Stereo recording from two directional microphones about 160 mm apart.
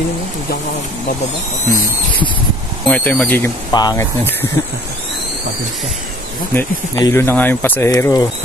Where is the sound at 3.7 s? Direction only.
25° left (ahead or behind).